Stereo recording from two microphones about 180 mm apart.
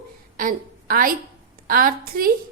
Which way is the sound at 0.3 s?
50° right (ahead or behind).